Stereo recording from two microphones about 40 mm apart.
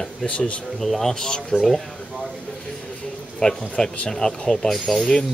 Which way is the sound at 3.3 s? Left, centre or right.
Centre.